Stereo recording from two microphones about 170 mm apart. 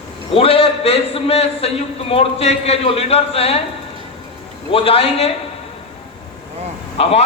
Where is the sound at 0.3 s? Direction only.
35° left (ahead or behind).